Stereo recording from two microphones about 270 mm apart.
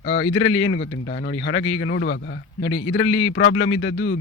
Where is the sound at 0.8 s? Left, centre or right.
Left.